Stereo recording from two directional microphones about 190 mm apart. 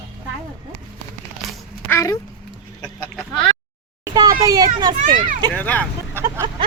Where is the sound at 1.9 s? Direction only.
15° left (ahead or behind).